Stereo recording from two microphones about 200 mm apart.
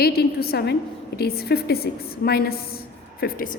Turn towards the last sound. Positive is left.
turn(degrees=45)  # may be behind; listen again after turning